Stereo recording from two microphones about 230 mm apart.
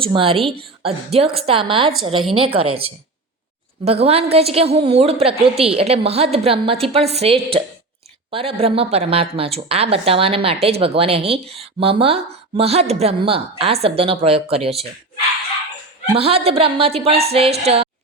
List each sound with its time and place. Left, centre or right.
0.0 s a woman's voice: right
16.1 s a woman's voice: right